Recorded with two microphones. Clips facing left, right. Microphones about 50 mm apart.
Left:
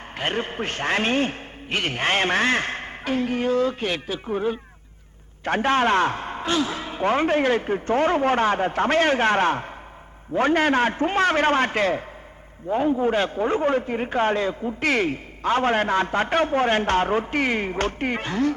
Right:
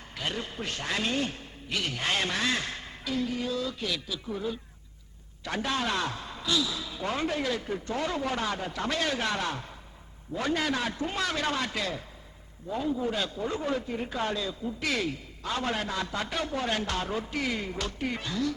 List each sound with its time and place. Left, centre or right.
0.2 s a man's voice: left